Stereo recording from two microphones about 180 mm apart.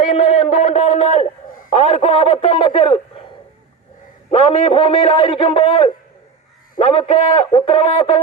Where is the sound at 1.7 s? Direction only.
40° left (ahead or behind).